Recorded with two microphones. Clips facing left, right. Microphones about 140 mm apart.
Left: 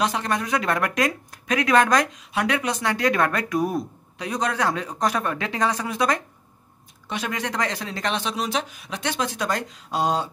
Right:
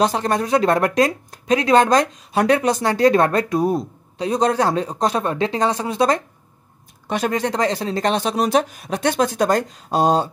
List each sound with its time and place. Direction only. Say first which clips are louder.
0.0 s speech: right 5 dB; 35° right (ahead or behind)